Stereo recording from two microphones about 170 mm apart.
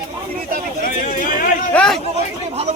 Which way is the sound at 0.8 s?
55° left (ahead or behind).